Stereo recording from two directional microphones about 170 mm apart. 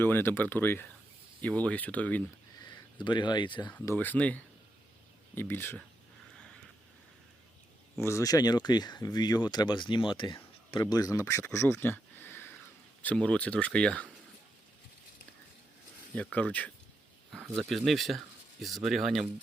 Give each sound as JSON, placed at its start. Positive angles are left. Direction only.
{"t": 0.0, "sound": "speech", "side_deg": 15}
{"t": 2.6, "sound": "speech", "side_deg": 25}
{"t": 3.7, "sound": "speech", "side_deg": 10}
{"t": 7.9, "sound": "speech", "side_deg": 15}
{"t": 16.1, "sound": "speech", "side_deg": 10}